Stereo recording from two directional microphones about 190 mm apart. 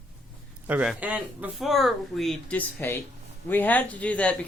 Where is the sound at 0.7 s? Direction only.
5° right (ahead or behind).